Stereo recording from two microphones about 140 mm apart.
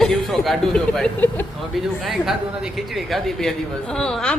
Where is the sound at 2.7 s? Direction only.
Centre (ahead or behind).